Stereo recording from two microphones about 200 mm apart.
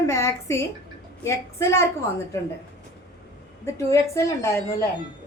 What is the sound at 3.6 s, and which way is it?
A woman's voice, 15° left (ahead or behind).